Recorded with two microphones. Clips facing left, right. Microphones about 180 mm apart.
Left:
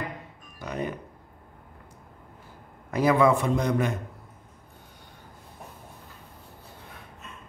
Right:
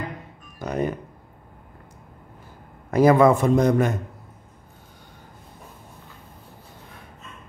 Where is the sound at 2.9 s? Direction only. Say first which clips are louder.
Right 5 dB; 45° right (ahead or behind).